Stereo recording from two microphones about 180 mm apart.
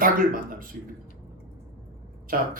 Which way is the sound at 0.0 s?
50° right (ahead or behind).